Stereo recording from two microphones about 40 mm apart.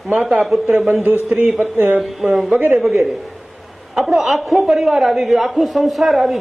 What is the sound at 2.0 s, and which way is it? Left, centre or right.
A man's voice, centre.